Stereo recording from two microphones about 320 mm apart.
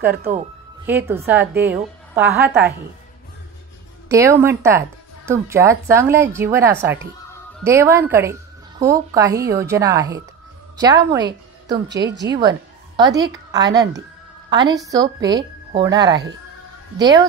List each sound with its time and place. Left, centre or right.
0.0 s speech: centre
4.1 s speech: centre
11.9 s speech: right
12.4 s a woman's voice: centre